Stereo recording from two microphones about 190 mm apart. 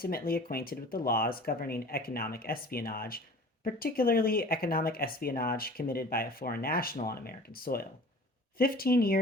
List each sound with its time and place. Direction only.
0.0 s speech: 50° left (ahead or behind)